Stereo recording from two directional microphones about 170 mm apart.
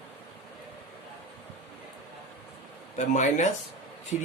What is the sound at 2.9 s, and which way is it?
Speech, 45° left (ahead or behind).